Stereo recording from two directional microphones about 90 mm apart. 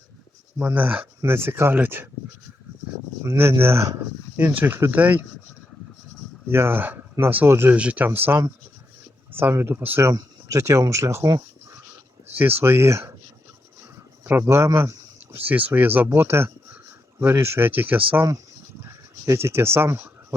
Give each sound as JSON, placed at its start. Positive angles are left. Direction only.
{"t": 0.6, "sound": "speech", "side_deg": -20}
{"t": 1.2, "sound": "speech", "side_deg": -25}
{"t": 3.2, "sound": "speech", "side_deg": -30}
{"t": 6.5, "sound": "speech", "side_deg": -25}
{"t": 10.1, "sound": "speech", "side_deg": -40}
{"t": 12.4, "sound": "speech", "side_deg": -20}
{"t": 14.3, "sound": "speech", "side_deg": -25}
{"t": 15.4, "sound": "speech", "side_deg": -20}
{"t": 18.8, "sound": "a sound", "side_deg": -30}